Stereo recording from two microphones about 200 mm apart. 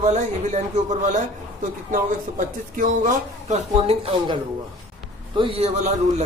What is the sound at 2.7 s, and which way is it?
Speech, 40° right (ahead or behind).